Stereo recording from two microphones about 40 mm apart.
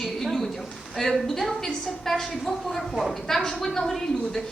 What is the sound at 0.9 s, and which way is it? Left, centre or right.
A woman's voice, centre.